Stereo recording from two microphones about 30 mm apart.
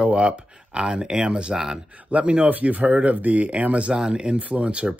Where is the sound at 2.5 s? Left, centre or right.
Right.